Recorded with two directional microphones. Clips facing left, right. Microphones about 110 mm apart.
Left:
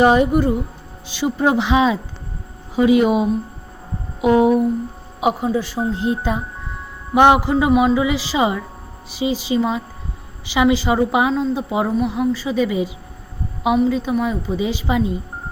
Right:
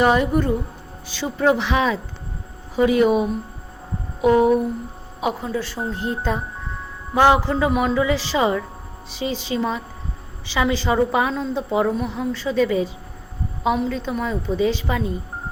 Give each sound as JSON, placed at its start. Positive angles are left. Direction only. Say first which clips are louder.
{"t": 0.0, "sound": "a woman's voice", "louder": "left 4 dB", "side_deg": 20}